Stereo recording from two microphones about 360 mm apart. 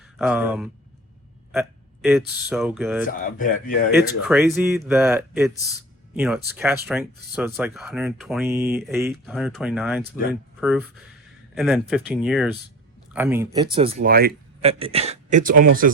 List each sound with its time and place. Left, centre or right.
0.2 s speech: centre
3.1 s speech: left
3.9 s speech: centre; by 15.6 s right